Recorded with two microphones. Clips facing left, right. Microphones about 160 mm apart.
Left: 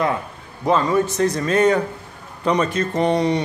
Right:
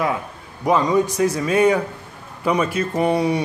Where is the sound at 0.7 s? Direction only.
15° right (ahead or behind).